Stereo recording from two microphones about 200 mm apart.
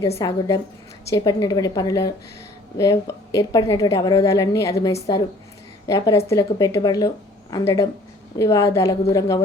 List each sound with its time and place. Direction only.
0.0 s a woman's voice: 15° left (ahead or behind)